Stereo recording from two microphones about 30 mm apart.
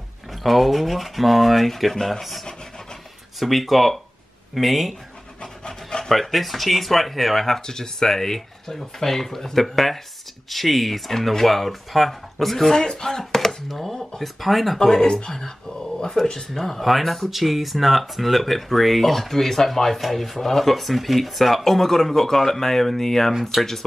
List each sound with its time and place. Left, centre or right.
0.3 s speech: centre
3.3 s speech: centre
5.4 s pant: left
6.1 s speech: centre
7.6 s speech: left
12.8 s speech: left
13.2 s chopping: centre
13.7 s speech: centre
14.8 s speech: centre
15.0 s speech: left; by 21.6 s centre
21.6 s speech: centre
23.5 s speech: centre